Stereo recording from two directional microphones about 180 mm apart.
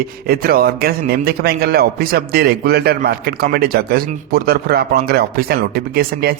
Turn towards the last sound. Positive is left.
turn(degrees=-60)  # may be behind; listen again after turning